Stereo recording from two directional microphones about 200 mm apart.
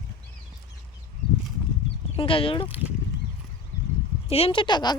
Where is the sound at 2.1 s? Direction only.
25° left (ahead or behind).